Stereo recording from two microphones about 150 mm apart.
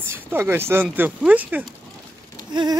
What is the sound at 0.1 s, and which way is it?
Speech, 15° right (ahead or behind).